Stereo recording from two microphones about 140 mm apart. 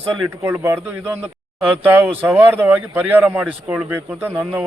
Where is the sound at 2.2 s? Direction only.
15° right (ahead or behind).